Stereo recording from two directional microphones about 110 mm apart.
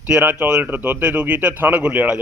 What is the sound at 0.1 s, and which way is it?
A man's voice, 15° right (ahead or behind).